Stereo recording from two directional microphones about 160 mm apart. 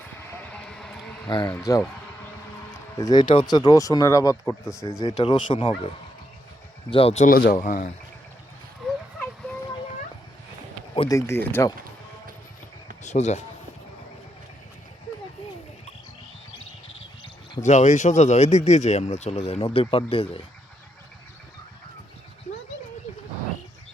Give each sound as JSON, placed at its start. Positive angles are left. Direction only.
{"t": 0.3, "sound": "a sound", "side_deg": 5}
{"t": 1.3, "sound": "speech", "side_deg": 25}
{"t": 3.0, "sound": "speech", "side_deg": 25}
{"t": 5.1, "sound": "speech", "side_deg": 30}
{"t": 6.9, "sound": "speech", "side_deg": 40}
{"t": 7.3, "sound": "speech", "side_deg": 75}
{"t": 7.5, "sound": "speech", "side_deg": 50}
{"t": 11.1, "sound": "speech", "side_deg": 20}
{"t": 13.0, "sound": "speech", "side_deg": 45}
{"t": 17.6, "sound": "speech", "side_deg": 45}